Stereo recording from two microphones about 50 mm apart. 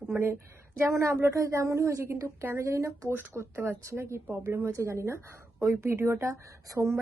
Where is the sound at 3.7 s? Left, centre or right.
Right.